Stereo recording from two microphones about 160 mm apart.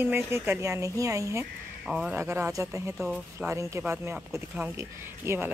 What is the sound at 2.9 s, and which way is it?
Speech, 5° right (ahead or behind).